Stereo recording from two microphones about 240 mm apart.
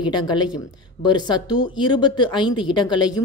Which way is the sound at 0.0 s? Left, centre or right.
Centre.